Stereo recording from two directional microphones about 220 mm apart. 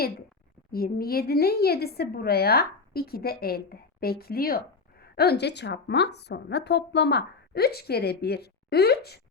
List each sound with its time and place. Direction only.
0.7 s a woman's voice: 40° left (ahead or behind)